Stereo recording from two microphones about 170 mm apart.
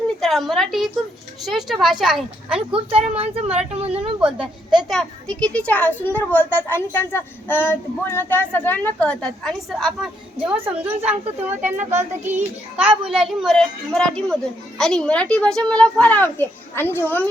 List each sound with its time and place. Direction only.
0.2 s a woman's voice: centre (ahead or behind)
2.7 s speech: 35° right (ahead or behind)
4.2 s a child's voice: 5° right (ahead or behind)
13.1 s a child's voice: centre (ahead or behind)